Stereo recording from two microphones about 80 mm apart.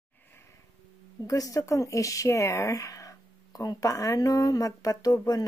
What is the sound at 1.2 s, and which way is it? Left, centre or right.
Speech, left.